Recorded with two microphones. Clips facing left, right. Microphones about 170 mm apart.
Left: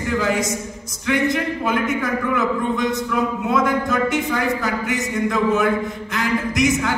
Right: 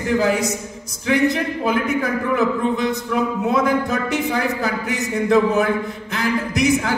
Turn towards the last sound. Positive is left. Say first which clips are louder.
# right 1 dB
turn(degrees=-35)  # may be behind; listen again after turning